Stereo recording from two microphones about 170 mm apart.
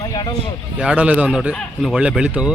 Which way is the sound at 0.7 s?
10° right (ahead or behind).